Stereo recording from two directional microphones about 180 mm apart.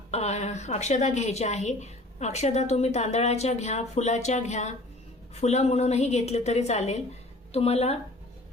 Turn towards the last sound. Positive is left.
turn(degrees=35)  # may be behind; listen again after turning